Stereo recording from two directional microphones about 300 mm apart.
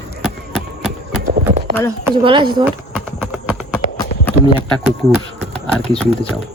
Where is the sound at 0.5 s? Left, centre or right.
Centre.